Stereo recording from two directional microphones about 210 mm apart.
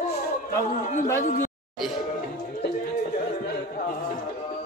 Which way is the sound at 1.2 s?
35° left (ahead or behind).